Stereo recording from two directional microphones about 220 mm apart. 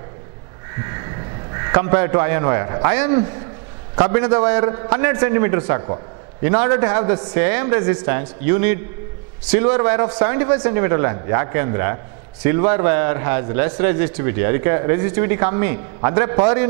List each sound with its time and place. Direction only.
0.7 s a sound: 15° right (ahead or behind)
1.5 s a man's voice: 20° right (ahead or behind)
4.2 s a man's voice: 10° right (ahead or behind)